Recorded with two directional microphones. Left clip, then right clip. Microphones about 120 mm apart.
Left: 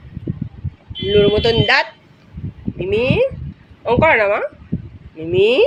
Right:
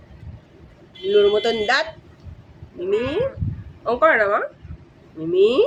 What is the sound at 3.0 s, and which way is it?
Speech, 15° left (ahead or behind).